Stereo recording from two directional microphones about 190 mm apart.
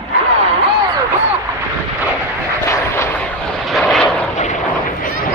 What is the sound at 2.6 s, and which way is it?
Vehicle, 15° left (ahead or behind).